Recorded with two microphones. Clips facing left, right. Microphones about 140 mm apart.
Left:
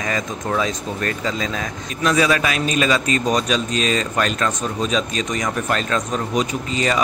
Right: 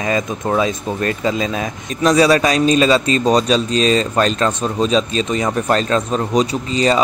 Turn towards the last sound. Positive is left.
turn(degrees=-30)  # may be behind; listen again after turning